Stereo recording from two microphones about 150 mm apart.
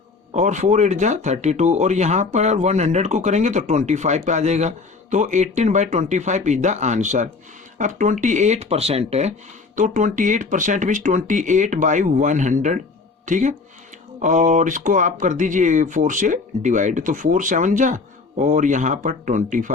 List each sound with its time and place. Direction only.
0.3 s speech: 55° right (ahead or behind)
9.7 s speech: 60° right (ahead or behind)